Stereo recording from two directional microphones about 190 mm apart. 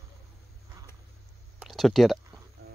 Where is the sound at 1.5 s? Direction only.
Centre (ahead or behind).